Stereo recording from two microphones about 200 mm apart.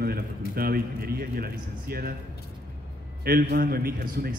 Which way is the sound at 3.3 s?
50° right (ahead or behind).